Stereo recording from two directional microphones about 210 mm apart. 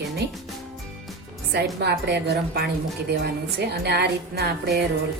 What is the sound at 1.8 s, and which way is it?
A woman's voice, 55° right (ahead or behind).